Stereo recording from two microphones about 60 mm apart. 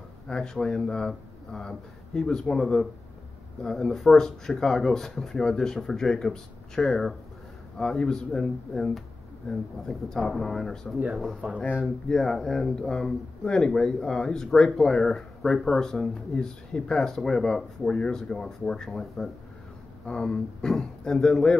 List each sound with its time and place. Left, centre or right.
0.3 s speech: centre
11.4 s speech: centre
11.8 s speech: centre